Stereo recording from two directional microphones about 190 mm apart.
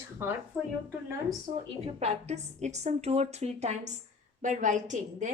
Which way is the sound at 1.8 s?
35° right (ahead or behind).